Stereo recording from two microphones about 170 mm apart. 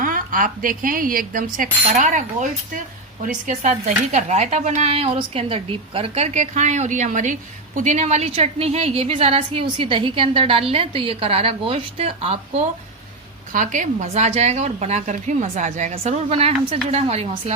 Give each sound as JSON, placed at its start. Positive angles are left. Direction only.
{"t": 0.0, "sound": "a woman's voice", "side_deg": -55}
{"t": 13.5, "sound": "a woman's voice", "side_deg": -50}